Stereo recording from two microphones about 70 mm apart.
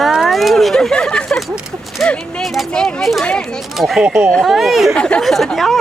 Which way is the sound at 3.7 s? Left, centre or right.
Centre.